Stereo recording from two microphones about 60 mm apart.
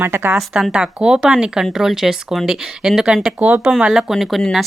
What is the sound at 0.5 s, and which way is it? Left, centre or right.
Speech, centre.